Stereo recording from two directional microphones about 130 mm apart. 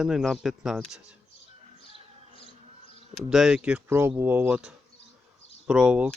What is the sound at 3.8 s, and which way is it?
Speech, 20° right (ahead or behind).